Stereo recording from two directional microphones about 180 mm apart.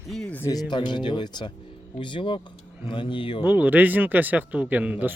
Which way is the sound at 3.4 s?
10° right (ahead or behind).